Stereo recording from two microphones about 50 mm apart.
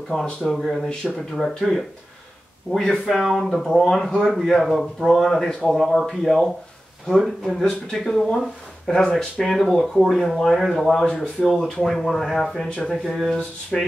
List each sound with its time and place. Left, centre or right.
0.1 s speech: centre
2.7 s speech: centre
12.6 s speech: centre
13.0 s speech: centre
13.7 s speech: centre